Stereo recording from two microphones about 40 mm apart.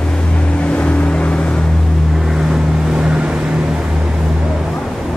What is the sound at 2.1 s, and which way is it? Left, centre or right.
Vehicle, centre.